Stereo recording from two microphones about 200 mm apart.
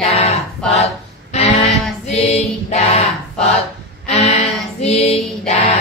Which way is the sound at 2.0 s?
30° left (ahead or behind).